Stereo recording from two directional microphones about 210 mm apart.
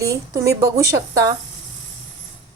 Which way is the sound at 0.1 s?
15° right (ahead or behind).